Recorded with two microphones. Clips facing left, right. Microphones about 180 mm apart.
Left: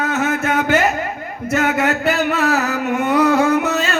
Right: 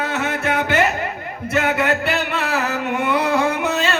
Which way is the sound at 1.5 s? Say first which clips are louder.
Left 1 dB; 45° left (ahead or behind).